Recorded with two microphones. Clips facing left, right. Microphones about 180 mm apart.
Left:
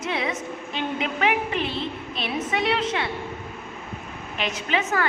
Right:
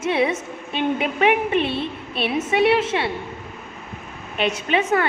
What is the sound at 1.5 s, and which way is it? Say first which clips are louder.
Speech: right 5 dB; 70° right (ahead or behind).